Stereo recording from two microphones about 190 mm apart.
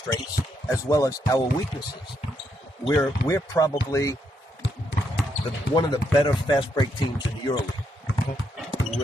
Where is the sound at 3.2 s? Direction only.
15° left (ahead or behind).